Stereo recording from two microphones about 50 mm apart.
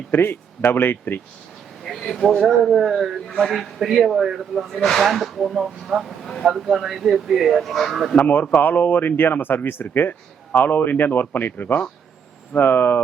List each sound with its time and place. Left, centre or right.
0.1 s speech: left
1.8 s a sound: centre
2.3 s a man's voice: centre
3.3 s a man's voice: centre
3.8 s a man's voice: centre
4.7 s a man's voice: centre
8.3 s a man's voice: left